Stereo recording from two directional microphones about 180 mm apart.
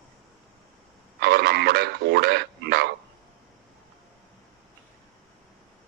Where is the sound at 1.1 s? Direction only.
65° right (ahead or behind).